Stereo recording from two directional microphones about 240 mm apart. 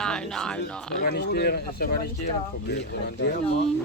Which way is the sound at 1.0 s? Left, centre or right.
Left.